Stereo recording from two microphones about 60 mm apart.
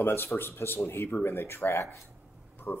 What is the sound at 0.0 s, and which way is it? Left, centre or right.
A man's voice, left.